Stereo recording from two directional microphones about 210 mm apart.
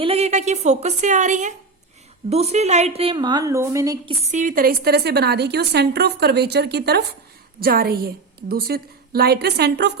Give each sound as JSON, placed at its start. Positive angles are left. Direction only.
{"t": 0.0, "sound": "a woman's voice", "side_deg": -30}
{"t": 4.2, "sound": "a woman's voice", "side_deg": -35}